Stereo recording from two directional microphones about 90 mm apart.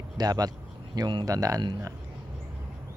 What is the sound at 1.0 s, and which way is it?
Speech, 60° right (ahead or behind).